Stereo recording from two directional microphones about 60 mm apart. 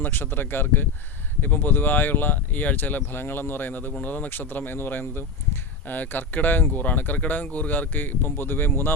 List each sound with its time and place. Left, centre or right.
0.0 s speech: left